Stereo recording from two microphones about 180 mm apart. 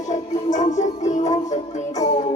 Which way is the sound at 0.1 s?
40° left (ahead or behind).